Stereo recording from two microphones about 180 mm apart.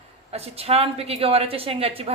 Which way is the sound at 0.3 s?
35° right (ahead or behind).